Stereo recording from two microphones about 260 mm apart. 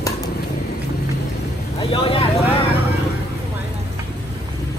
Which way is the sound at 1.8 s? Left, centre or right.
Left.